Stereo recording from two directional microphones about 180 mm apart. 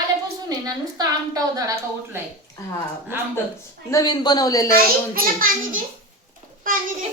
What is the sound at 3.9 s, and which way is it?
Speech, 20° left (ahead or behind).